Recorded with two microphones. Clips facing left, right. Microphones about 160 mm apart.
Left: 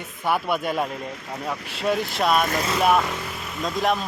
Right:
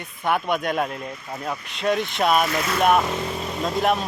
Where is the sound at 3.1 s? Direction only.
30° right (ahead or behind).